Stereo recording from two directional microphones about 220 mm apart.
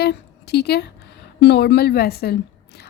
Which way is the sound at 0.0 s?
50° left (ahead or behind).